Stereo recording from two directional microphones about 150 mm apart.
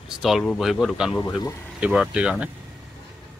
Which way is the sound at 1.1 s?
30° left (ahead or behind).